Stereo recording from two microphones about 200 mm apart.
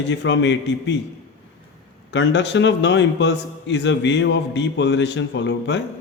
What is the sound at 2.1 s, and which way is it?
A man's voice, 60° left (ahead or behind).